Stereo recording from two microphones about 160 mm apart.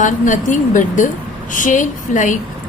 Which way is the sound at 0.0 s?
50° left (ahead or behind).